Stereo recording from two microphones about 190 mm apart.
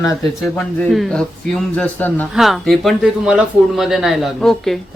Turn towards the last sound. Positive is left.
turn(degrees=0)  # may be behind; listen again after turning